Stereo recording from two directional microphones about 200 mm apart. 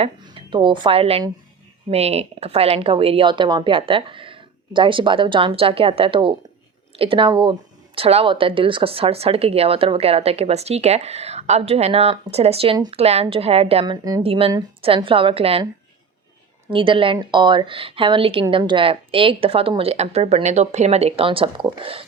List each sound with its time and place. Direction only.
0.0 s speech: 25° right (ahead or behind)
16.7 s speech: 25° right (ahead or behind)